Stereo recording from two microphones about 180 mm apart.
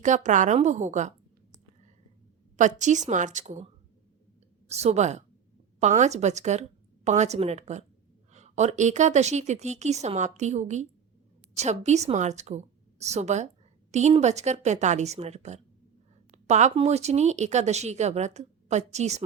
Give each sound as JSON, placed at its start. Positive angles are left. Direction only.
{"t": 0.0, "sound": "a woman's voice", "side_deg": -45}
{"t": 2.6, "sound": "a woman's voice", "side_deg": -40}
{"t": 4.7, "sound": "speech", "side_deg": -35}